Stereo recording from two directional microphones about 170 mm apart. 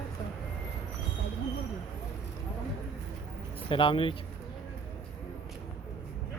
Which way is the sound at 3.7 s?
30° left (ahead or behind).